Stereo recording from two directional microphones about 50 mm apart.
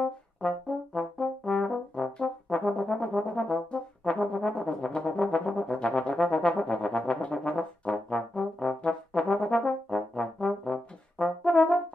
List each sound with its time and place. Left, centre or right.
0.4 s brass instrument: centre
9.9 s trombone: centre
11.2 s brass instrument: centre